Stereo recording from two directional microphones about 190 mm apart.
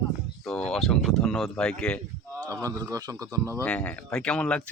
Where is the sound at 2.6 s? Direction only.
20° right (ahead or behind).